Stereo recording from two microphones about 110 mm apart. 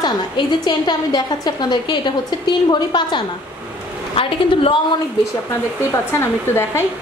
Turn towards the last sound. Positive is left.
turn(degrees=20)  # may be behind; listen again after turning